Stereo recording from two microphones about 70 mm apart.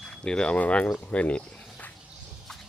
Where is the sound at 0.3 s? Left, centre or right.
Centre.